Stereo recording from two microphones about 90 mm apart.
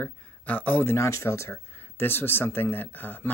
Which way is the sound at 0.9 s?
30° left (ahead or behind).